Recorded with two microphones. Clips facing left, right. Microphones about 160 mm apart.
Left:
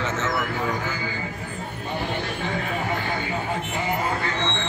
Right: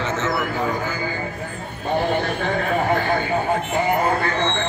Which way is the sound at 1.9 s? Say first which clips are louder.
Right 8 dB; 55° right (ahead or behind).